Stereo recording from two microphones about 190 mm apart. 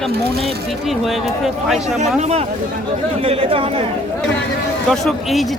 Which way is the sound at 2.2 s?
35° right (ahead or behind).